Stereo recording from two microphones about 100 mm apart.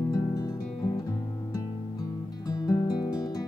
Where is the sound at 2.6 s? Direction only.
45° left (ahead or behind).